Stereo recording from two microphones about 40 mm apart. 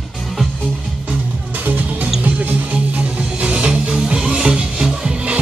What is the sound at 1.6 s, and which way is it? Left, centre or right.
Music, right.